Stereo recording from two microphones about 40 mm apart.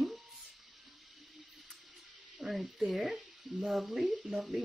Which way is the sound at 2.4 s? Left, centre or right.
Right.